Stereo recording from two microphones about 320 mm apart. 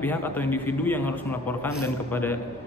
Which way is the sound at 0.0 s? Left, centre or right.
Centre.